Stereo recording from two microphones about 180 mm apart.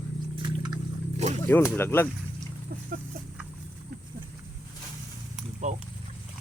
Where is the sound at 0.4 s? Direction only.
25° right (ahead or behind).